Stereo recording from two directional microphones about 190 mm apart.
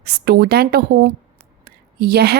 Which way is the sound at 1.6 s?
55° right (ahead or behind).